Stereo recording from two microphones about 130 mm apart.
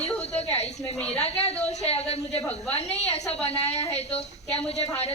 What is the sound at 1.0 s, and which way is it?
Speech, 10° left (ahead or behind).